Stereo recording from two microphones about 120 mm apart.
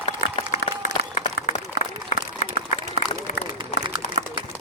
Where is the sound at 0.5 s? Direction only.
85° left.